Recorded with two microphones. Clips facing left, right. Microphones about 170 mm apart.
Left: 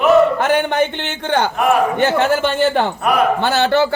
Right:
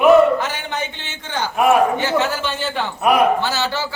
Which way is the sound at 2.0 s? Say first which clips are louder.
Left 5 dB; 55° left (ahead or behind).